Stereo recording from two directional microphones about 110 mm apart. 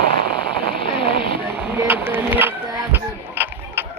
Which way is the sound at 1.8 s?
20° right (ahead or behind).